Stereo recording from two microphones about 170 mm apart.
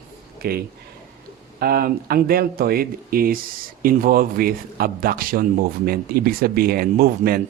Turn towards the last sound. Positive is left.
turn(degrees=-65)  # may be behind; listen again after turning